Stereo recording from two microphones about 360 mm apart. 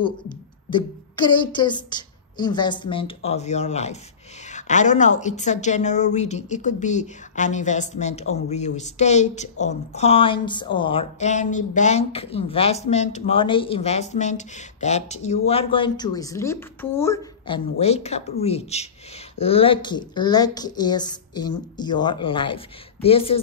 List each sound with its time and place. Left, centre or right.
0.7 s a woman's voice: centre